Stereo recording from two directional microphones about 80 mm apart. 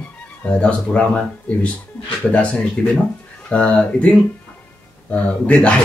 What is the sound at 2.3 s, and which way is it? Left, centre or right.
Speech, centre.